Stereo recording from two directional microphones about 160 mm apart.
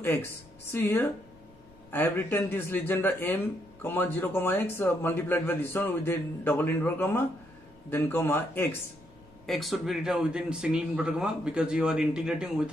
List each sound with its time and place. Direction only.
0.7 s a man's voice: 15° left (ahead or behind)
9.5 s speech: centre (ahead or behind)